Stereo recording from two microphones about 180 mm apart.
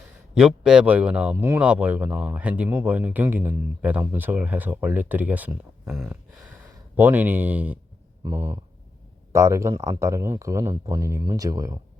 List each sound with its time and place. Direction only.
0.3 s speech: 5° right (ahead or behind)